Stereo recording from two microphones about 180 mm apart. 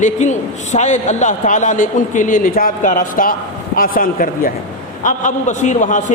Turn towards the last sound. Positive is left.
turn(degrees=45)  # may be behind; listen again after turning